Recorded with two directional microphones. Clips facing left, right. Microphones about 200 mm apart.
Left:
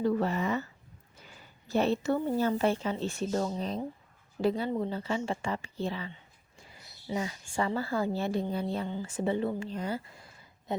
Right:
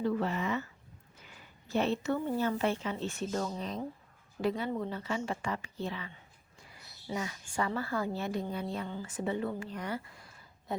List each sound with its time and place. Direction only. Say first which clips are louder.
0.0 s speech: left 3 dB; 40° left (ahead or behind)
1.6 s speech: left 3 dB; 35° left (ahead or behind)
7.1 s a woman's voice: left 3 dB; 25° left (ahead or behind)